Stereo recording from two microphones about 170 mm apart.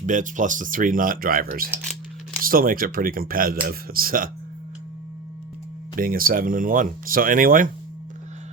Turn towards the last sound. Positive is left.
turn(degrees=-55)  # may be behind; listen again after turning